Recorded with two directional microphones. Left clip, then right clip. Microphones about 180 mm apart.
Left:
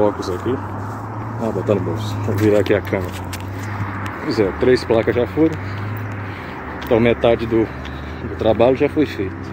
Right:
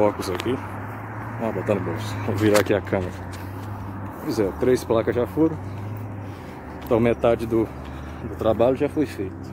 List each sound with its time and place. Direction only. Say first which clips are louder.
0.0 s speech: left 3 dB; 15° right (ahead or behind)
2.5 s speech: left 3 dB; 25° right (ahead or behind)
4.3 s speech: left 5 dB; 15° right (ahead or behind)
6.9 s speech: left 5 dB; 15° right (ahead or behind)